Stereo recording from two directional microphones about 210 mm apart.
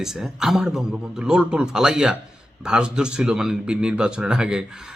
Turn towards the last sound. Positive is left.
turn(degrees=-5)  # may be behind; listen again after turning